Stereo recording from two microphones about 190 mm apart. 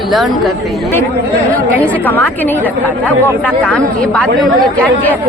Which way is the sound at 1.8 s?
10° left (ahead or behind).